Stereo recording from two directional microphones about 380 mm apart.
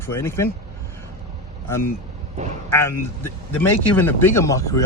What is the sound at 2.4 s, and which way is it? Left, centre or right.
Speech, centre.